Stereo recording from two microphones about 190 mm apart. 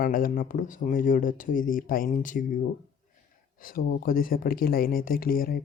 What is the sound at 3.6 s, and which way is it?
Speech, 50° left (ahead or behind).